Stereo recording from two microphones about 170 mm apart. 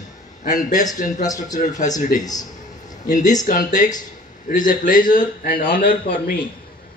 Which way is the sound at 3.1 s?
45° left (ahead or behind).